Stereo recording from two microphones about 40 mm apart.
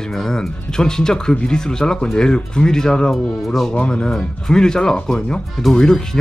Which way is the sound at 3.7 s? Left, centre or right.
Left.